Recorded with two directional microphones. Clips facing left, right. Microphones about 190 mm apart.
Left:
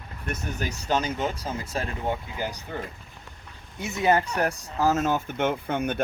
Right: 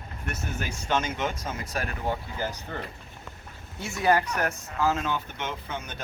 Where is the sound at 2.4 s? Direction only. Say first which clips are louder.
Left 1 dB; 15° left (ahead or behind).